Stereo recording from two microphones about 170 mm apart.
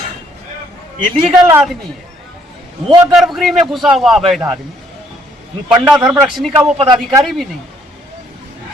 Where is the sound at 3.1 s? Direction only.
Centre (ahead or behind).